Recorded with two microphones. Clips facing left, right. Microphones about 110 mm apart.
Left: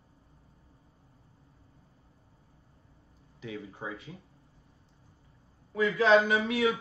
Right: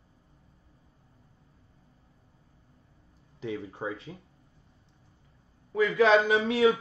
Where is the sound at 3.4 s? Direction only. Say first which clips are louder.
Right 5 dB; 30° right (ahead or behind).